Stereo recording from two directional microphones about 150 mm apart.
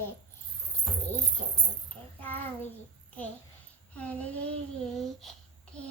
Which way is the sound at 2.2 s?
10° left (ahead or behind).